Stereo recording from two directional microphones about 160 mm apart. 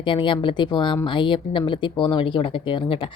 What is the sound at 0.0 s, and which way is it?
Speech, 30° left (ahead or behind).